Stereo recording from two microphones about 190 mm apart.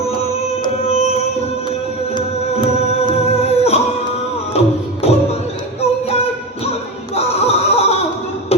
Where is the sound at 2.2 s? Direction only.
25° left (ahead or behind).